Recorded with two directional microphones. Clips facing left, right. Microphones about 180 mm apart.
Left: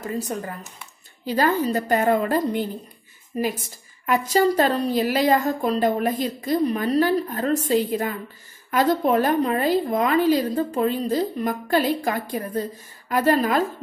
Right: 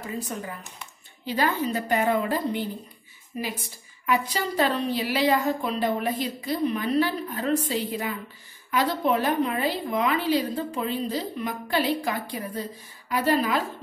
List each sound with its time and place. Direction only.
0.0 s a woman's voice: 45° left (ahead or behind)